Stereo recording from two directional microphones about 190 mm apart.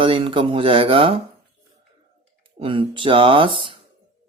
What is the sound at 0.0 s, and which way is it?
Speech, 25° right (ahead or behind).